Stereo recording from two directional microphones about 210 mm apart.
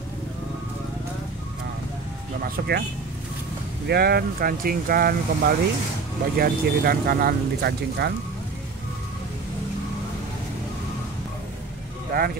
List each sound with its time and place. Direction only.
2.4 s speech: 45° right (ahead or behind)
3.8 s speech: 50° right (ahead or behind)
12.1 s speech: 50° right (ahead or behind)